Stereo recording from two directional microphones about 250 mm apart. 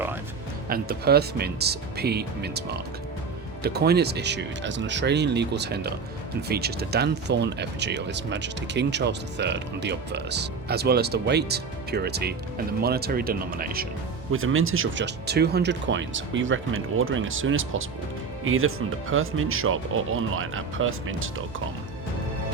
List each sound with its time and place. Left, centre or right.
0.7 s speech: right
14.3 s speech: right